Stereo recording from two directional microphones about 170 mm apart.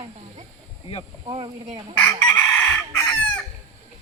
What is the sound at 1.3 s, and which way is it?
Speech, 35° right (ahead or behind).